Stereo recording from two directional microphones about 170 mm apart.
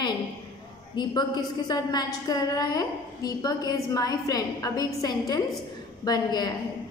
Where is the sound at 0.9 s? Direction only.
25° left (ahead or behind).